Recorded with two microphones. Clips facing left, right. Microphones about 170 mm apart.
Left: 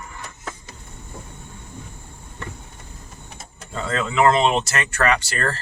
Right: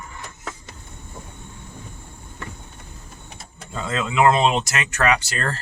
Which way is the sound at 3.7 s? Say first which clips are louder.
Even; 15° right (ahead or behind).